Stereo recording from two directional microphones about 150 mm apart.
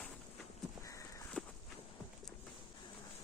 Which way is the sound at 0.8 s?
20° left (ahead or behind).